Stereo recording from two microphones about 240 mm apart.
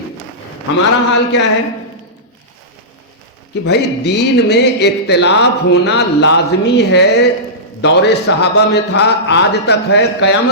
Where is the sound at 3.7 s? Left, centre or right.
Left.